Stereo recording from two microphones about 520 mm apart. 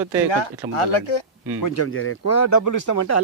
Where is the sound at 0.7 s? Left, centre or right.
Left.